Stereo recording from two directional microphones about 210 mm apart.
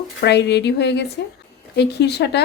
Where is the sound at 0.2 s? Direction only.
55° left (ahead or behind).